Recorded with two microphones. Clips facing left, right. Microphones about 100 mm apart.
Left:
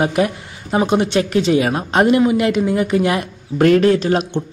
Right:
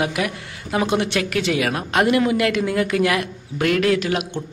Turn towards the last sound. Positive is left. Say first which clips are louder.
# left 5 dB
turn(degrees=35)  # may be behind; listen again after turning